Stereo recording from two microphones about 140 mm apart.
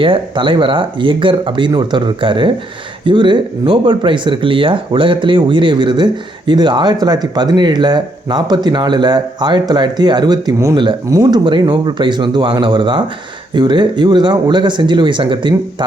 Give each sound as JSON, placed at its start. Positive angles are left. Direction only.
{"t": 0.0, "sound": "speech", "side_deg": -35}